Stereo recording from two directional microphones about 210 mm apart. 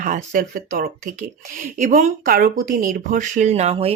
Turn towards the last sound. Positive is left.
turn(degrees=-30)  # may be behind; listen again after turning